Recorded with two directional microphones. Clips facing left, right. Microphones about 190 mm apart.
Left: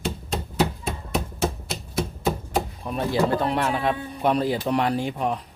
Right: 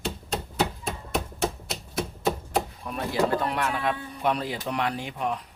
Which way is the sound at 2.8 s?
25° left (ahead or behind).